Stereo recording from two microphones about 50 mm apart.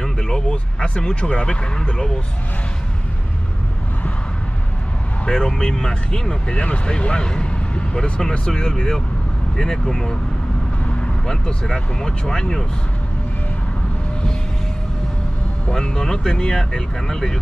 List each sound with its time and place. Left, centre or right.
0.0 s speech: centre
5.2 s speech: centre
11.2 s speech: centre
15.7 s speech: centre